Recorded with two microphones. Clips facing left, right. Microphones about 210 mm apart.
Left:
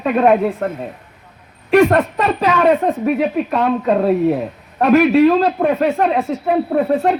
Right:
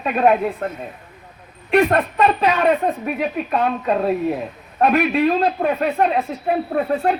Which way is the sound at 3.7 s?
40° left (ahead or behind).